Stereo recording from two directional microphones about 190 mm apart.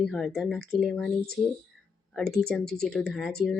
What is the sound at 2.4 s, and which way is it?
Speech, centre (ahead or behind).